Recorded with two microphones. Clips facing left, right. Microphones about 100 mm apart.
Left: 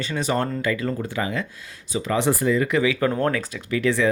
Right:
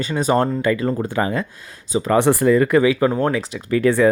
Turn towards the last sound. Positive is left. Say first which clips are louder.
# right 5 dB
turn(degrees=-40)  # may be behind; listen again after turning